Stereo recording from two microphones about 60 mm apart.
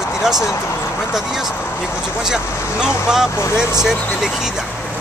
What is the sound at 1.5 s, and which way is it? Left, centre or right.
Speech, left.